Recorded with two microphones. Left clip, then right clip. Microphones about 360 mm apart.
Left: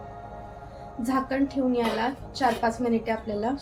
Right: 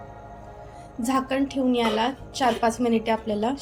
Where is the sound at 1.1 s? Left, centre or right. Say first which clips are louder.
Right 2 dB; centre.